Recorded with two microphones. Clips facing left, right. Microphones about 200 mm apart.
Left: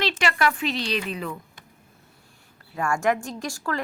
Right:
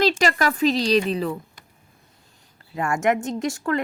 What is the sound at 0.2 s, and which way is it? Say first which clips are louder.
Speech: right 4 dB; 40° right (ahead or behind).